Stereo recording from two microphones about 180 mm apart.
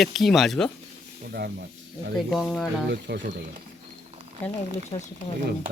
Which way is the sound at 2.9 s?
80° right.